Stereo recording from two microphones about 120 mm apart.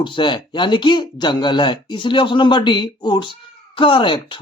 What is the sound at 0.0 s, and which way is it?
Speech, 40° left (ahead or behind).